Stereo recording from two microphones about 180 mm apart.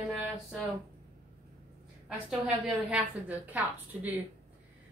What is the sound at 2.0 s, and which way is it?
A woman's voice, 5° right (ahead or behind).